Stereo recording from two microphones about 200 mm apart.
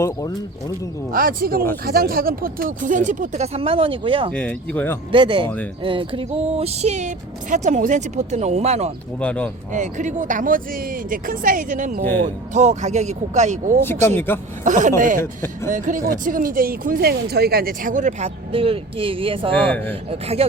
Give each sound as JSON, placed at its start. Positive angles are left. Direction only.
{"t": 0.0, "sound": "speech", "side_deg": 15}
{"t": 1.1, "sound": "speech", "side_deg": -45}
{"t": 4.4, "sound": "speech", "side_deg": 5}
{"t": 5.1, "sound": "music", "side_deg": -25}
{"t": 7.5, "sound": "speech", "side_deg": -40}
{"t": 9.2, "sound": "speech", "side_deg": 5}
{"t": 9.7, "sound": "speech", "side_deg": -40}
{"t": 13.8, "sound": "speech", "side_deg": 10}
{"t": 14.6, "sound": "speech", "side_deg": -40}
{"t": 15.2, "sound": "speech", "side_deg": 10}
{"t": 15.7, "sound": "speech", "side_deg": -40}
{"t": 19.5, "sound": "speech", "side_deg": 10}
{"t": 20.1, "sound": "music", "side_deg": -30}